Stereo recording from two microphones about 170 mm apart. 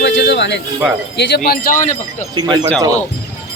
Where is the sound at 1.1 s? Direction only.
70° left (ahead or behind); by 2.3 s 50° left (ahead or behind).